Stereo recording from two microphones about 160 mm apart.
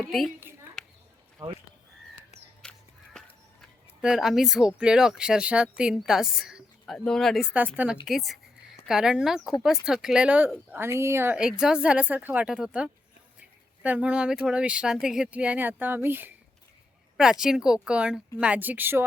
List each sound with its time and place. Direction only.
2.6 s crow: 5° left (ahead or behind)
4.0 s speech: 5° right (ahead or behind)
17.4 s speech: 5° right (ahead or behind)